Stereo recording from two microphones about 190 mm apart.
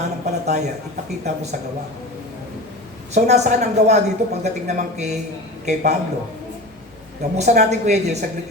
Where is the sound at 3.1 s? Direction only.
35° right (ahead or behind).